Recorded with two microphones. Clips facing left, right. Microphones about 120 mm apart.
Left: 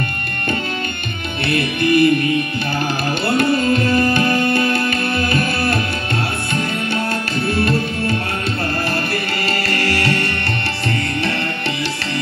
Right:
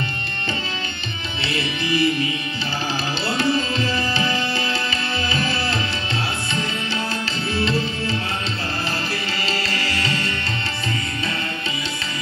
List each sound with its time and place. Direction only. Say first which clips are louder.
1.4 s music: left 8 dB; 55° left (ahead or behind)
3.3 s music: left 6 dB; 55° left (ahead or behind)
7.4 s music: left 4 dB; 55° left (ahead or behind)
9.5 s music: left 7 dB; 60° left (ahead or behind)